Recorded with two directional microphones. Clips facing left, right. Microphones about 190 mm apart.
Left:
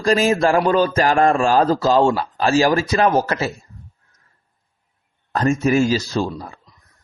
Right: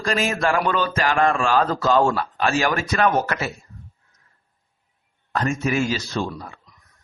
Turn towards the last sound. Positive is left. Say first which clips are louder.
# left 4 dB
turn(degrees=35)  # may be behind; listen again after turning